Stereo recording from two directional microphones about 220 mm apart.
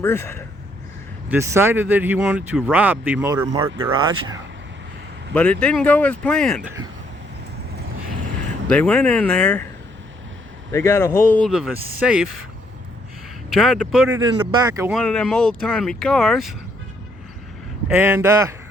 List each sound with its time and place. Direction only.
0.0 s speech: 10° left (ahead or behind)
1.3 s speech: 10° right (ahead or behind)
5.3 s speech: 5° left (ahead or behind)
8.7 s speech: 5° left (ahead or behind)
10.7 s speech: 10° left (ahead or behind)
13.5 s speech: centre (ahead or behind)
14.3 s speech: 20° right (ahead or behind)
14.9 s speech: 5° left (ahead or behind)
17.8 s speech: 10° right (ahead or behind)